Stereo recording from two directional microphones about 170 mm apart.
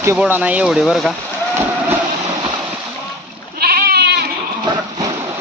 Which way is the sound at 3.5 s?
65° right (ahead or behind).